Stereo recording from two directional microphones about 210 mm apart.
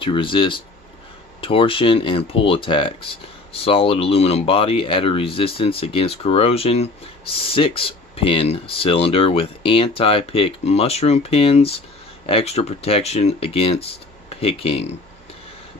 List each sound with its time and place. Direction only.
0.0 s speech: 25° left (ahead or behind)